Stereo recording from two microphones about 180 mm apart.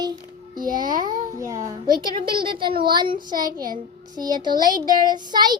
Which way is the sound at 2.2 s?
25° right (ahead or behind).